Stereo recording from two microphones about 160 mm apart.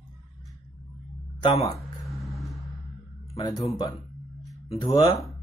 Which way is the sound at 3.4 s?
25° left (ahead or behind).